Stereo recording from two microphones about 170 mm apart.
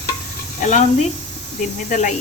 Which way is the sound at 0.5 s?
45° left (ahead or behind).